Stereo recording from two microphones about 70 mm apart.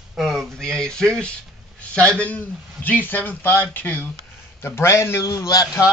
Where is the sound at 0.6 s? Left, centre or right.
Centre; by 4.0 s left.